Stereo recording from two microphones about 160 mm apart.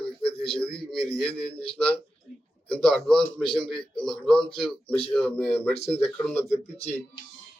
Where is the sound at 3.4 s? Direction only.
30° left (ahead or behind).